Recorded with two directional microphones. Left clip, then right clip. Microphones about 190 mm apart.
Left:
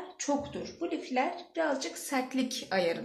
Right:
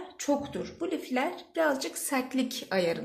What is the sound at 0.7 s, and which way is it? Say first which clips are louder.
A woman's voice: even; 45° right (ahead or behind).